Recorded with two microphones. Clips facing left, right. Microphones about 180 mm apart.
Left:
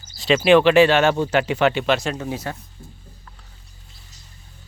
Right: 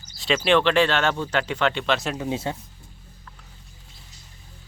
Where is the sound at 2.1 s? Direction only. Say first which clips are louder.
Right 1 dB; 20° right (ahead or behind).